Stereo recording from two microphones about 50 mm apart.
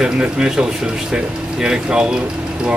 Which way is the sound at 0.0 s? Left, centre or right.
Centre.